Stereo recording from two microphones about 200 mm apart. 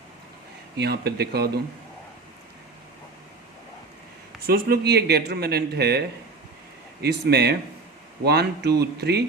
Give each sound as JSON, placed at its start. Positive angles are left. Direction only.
{"t": 0.8, "sound": "speech", "side_deg": -55}
{"t": 4.4, "sound": "speech", "side_deg": -50}
{"t": 7.0, "sound": "speech", "side_deg": -55}